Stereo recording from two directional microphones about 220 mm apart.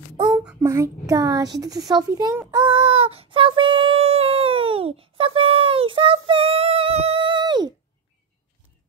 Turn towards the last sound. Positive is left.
turn(degrees=-20)  # may be behind; listen again after turning